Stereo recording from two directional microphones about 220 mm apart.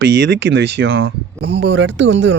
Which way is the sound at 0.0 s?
50° right (ahead or behind).